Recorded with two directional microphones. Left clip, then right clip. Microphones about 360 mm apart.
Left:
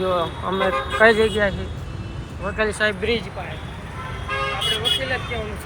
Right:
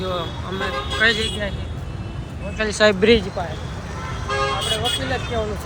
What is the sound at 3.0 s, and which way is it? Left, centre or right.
Speech, right.